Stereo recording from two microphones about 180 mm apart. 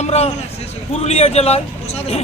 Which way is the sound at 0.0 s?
35° left (ahead or behind).